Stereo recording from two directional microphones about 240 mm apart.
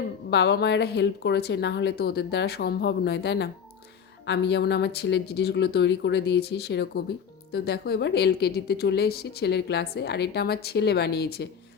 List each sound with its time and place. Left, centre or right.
0.3 s a woman's voice: left